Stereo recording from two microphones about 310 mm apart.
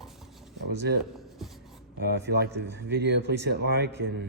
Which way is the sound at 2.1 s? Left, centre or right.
Right.